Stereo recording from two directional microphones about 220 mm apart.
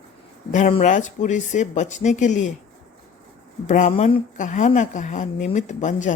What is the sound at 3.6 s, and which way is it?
Speech, 35° left (ahead or behind).